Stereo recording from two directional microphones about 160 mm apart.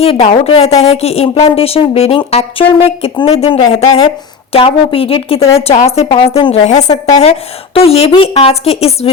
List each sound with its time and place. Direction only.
0.0 s a woman's voice: 35° left (ahead or behind)